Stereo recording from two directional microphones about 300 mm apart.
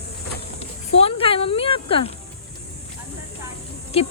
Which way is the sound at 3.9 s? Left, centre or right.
Left.